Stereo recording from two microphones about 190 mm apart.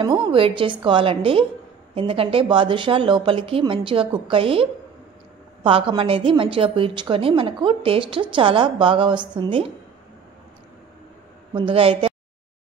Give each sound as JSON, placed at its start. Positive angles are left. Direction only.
{"t": 0.0, "sound": "a woman's voice", "side_deg": -30}
{"t": 11.5, "sound": "a woman's voice", "side_deg": -30}